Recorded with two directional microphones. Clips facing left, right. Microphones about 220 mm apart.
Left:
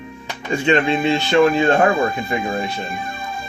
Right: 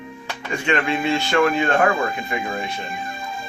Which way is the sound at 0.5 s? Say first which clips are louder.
Left 5 dB; 25° left (ahead or behind).